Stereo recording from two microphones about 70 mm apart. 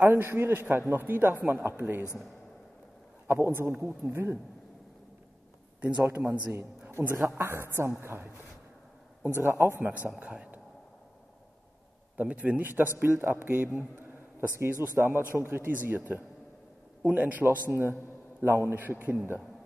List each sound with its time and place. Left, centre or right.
0.0 s a man's voice: right
3.3 s a man's voice: right
6.0 s a man's voice: right
9.4 s a man's voice: right
9.8 s a man's voice: right
12.2 s a man's voice: right
17.6 s a man's voice: right